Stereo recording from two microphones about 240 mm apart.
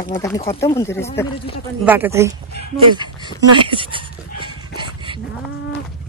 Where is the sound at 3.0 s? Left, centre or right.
Centre.